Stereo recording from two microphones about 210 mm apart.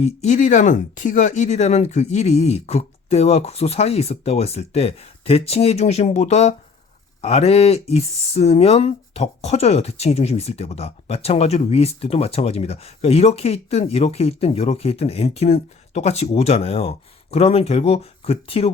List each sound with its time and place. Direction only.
0.0 s speech: 35° left (ahead or behind)